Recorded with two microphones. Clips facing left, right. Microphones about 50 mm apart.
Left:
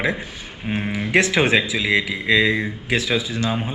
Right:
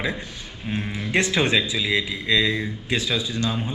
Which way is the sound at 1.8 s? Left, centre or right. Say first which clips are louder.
Left 4 dB; left.